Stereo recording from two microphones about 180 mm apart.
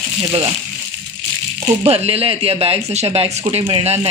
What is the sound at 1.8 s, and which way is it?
Speech, 35° right (ahead or behind).